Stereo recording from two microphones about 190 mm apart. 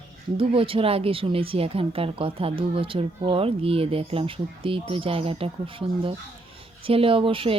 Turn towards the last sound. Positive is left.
turn(degrees=-30)  # may be behind; listen again after turning